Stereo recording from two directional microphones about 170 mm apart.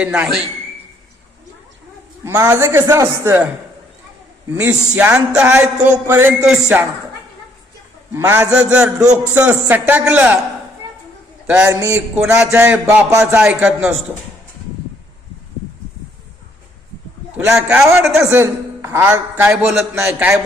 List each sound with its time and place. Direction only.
0.0 s a man's voice: 10° right (ahead or behind)
2.2 s a man's voice: 15° right (ahead or behind)
4.5 s a man's voice: 10° right (ahead or behind)
8.1 s a man's voice: 15° right (ahead or behind)
11.4 s a man's voice: 10° right (ahead or behind)
17.5 s a man's voice: centre (ahead or behind)
18.2 s a man's voice: 15° right (ahead or behind)